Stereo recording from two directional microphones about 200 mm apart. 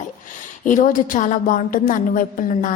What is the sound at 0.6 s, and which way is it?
A woman's voice, 40° left (ahead or behind).